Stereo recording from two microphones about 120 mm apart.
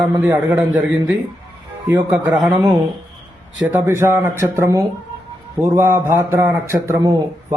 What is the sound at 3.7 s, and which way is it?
A man's voice, 20° right (ahead or behind).